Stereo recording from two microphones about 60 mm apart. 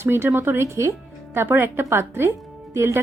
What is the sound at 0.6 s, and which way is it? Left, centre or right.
Speech, right.